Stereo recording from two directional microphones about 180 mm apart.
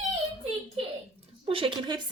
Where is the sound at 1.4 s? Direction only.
30° right (ahead or behind).